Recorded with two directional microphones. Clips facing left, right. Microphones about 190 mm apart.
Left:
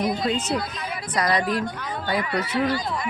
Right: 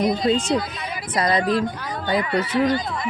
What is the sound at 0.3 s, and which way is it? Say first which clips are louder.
Speech: right 5 dB; 30° right (ahead or behind).